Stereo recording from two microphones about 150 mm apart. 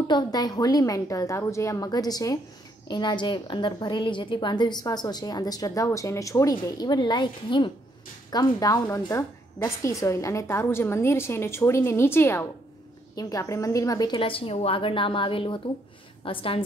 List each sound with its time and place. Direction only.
0.1 s a woman's voice: 30° left (ahead or behind)